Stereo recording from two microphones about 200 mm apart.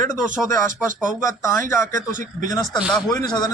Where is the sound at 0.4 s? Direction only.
15° left (ahead or behind).